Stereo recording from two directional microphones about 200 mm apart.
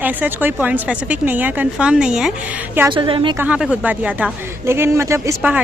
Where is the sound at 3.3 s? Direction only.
5° right (ahead or behind).